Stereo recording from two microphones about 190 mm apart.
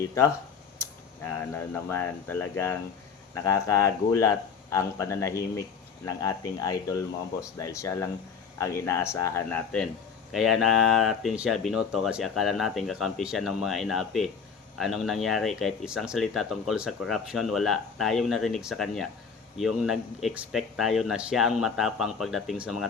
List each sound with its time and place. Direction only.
0.8 s speech: 10° left (ahead or behind); by 22.9 s 5° right (ahead or behind)